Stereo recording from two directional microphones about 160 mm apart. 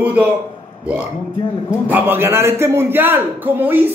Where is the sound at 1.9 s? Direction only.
15° right (ahead or behind).